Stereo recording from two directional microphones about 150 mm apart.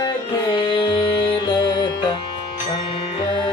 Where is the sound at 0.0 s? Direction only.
30° left (ahead or behind).